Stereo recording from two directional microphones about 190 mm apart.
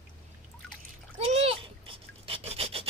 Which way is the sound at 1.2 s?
30° right (ahead or behind).